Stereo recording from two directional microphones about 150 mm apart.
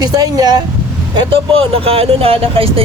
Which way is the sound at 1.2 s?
40° right (ahead or behind).